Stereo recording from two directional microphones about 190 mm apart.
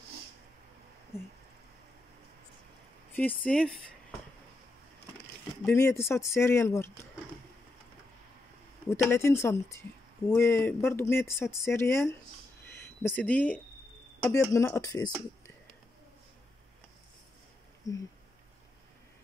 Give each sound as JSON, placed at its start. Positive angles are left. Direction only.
{"t": 3.2, "sound": "speech", "side_deg": 5}
{"t": 5.7, "sound": "speech", "side_deg": 15}
{"t": 9.1, "sound": "speech", "side_deg": 15}